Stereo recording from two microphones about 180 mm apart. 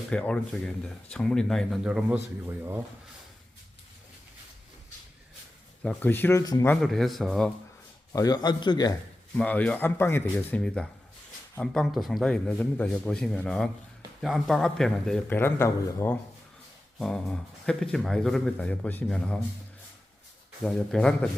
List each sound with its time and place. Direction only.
0.1 s speech: 5° left (ahead or behind)
5.8 s speech: 10° left (ahead or behind)
6.8 s speech: centre (ahead or behind)
8.1 s a man's voice: 20° left (ahead or behind)
9.4 s speech: 10° left (ahead or behind)
17.0 s speech: centre (ahead or behind)
20.7 s speech: 5° left (ahead or behind)